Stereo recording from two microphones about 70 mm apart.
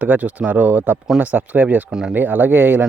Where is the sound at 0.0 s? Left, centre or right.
Right.